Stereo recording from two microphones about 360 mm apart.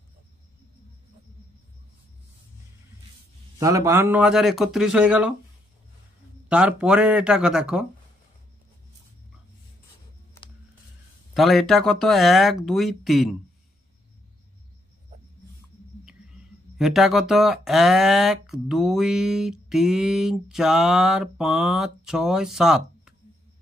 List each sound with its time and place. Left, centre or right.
3.5 s speech: centre
6.5 s speech: centre
11.3 s speech: centre
16.7 s speech: centre